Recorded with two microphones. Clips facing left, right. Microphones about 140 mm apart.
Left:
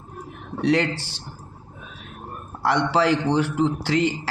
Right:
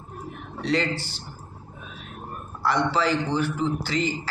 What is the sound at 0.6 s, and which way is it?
Speech, 75° left (ahead or behind).